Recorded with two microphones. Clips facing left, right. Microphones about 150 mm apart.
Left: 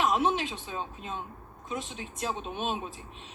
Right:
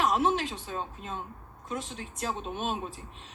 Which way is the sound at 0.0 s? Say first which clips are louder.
Even; 20° left (ahead or behind).